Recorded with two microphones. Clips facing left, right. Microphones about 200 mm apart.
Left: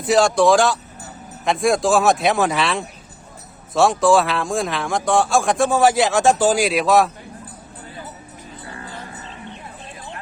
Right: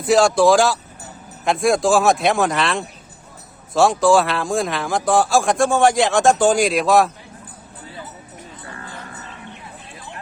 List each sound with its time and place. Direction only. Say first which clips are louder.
0.0 s speech: right 1 dB; centre (ahead or behind)
8.7 s music: left 2 dB; 30° left (ahead or behind)